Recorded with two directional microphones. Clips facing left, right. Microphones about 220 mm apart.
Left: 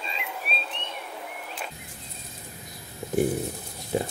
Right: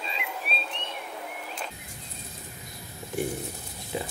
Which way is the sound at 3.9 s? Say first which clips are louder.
Left 6 dB; 45° left (ahead or behind).